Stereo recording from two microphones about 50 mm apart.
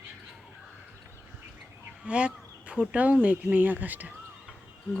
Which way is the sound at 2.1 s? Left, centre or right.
Right.